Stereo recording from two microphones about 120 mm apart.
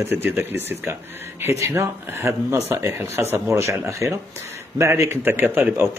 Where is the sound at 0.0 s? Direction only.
15° right (ahead or behind).